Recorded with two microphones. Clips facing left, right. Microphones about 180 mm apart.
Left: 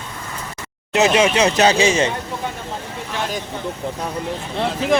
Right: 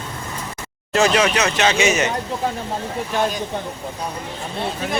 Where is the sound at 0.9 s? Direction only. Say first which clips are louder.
Left 2 dB; 20° left (ahead or behind).